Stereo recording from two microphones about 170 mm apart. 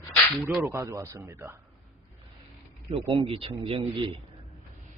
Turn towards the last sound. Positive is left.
turn(degrees=-30)  # may be behind; listen again after turning